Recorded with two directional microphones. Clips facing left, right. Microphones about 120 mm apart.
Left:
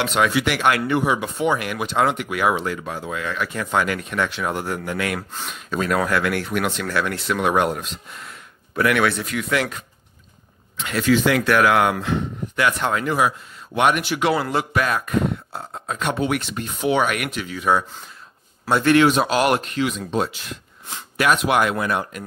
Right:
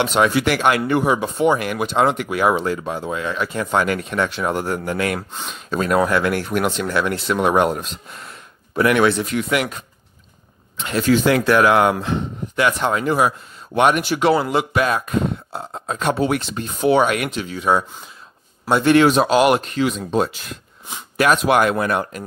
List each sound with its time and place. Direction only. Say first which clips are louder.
0.0 s speech: right 3 dB; 35° right (ahead or behind)
0.6 s speech: right 2 dB; 30° right (ahead or behind)
6.8 s speech: right 3 dB; 25° right (ahead or behind)
9.5 s speech: left 1 dB; 15° right (ahead or behind)
10.8 s speech: right 2 dB; 35° right (ahead or behind)
13.7 s speech: right 3 dB; 35° right (ahead or behind)
14.4 s speech: right 3 dB; 20° right (ahead or behind)
18.9 s speech: right 3 dB; 35° right (ahead or behind)
19.3 s speech: right 4 dB; 20° right (ahead or behind)
19.7 s speech: right 3 dB; 35° right (ahead or behind)